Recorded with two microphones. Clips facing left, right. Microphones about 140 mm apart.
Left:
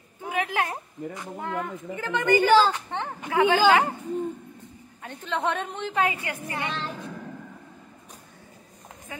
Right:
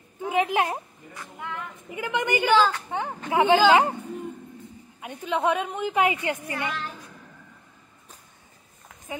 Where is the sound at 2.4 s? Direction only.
35° left (ahead or behind).